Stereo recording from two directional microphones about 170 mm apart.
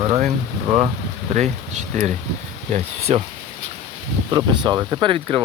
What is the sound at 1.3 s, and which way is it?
Speech, 45° right (ahead or behind).